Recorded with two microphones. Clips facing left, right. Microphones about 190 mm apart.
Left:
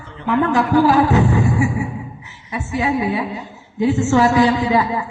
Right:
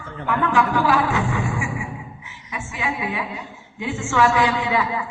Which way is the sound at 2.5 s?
40° left (ahead or behind).